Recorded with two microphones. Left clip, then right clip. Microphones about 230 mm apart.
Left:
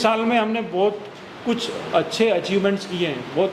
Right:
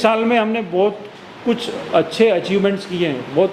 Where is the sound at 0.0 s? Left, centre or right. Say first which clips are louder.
Right 4 dB; right.